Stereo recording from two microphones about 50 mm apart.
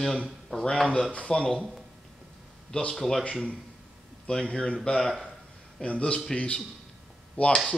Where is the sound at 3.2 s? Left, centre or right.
Left.